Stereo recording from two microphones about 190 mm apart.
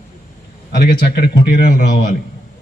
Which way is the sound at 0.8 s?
45° left (ahead or behind).